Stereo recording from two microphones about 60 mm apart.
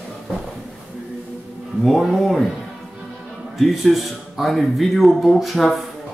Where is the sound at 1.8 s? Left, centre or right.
Centre.